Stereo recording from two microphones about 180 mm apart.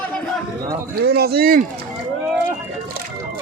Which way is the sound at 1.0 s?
60° right (ahead or behind).